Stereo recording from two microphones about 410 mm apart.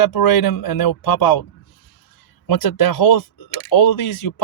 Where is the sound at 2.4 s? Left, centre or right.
Left.